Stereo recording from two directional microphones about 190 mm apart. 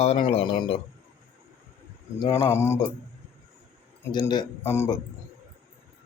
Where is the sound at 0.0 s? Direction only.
35° left (ahead or behind).